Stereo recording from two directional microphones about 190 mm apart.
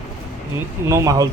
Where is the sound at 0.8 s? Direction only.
15° right (ahead or behind).